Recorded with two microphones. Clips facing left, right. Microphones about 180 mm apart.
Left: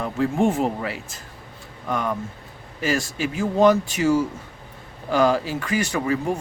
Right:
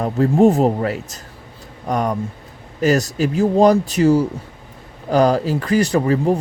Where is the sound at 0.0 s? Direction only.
40° right (ahead or behind).